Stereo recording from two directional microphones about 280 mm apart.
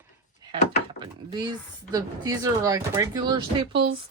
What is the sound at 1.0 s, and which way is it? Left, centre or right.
Speech, centre.